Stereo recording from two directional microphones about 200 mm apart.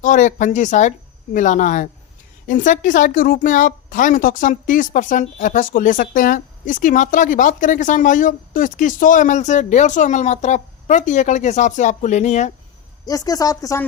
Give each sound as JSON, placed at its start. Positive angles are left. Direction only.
{"t": 0.0, "sound": "a woman's voice", "side_deg": 40}
{"t": 13.1, "sound": "speech", "side_deg": 20}